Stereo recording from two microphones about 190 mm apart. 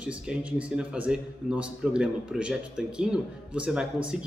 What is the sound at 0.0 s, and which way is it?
A man's voice, 5° right (ahead or behind).